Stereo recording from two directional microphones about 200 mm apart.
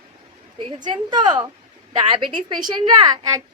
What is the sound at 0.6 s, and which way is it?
A woman's voice, 25° right (ahead or behind).